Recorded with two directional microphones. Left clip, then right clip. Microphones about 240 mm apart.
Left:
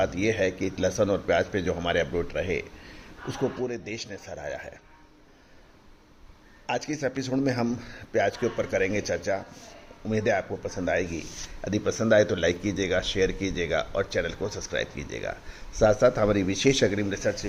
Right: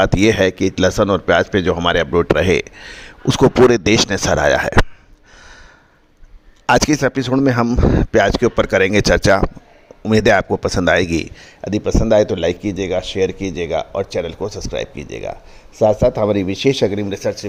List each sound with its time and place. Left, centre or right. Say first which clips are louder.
0.0 s speech: right 11 dB; right
6.7 s speech: right 15 dB; right
11.6 s speech: right 8 dB; right